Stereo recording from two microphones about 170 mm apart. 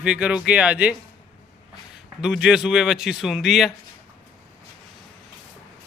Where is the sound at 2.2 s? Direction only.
5° right (ahead or behind).